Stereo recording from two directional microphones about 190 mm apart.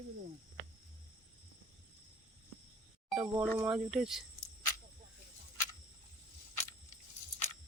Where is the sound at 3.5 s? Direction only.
5° right (ahead or behind).